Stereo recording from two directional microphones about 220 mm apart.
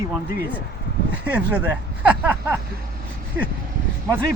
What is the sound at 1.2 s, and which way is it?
Speech, 5° right (ahead or behind).